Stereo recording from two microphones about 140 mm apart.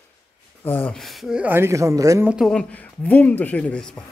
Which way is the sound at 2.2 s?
Centre (ahead or behind).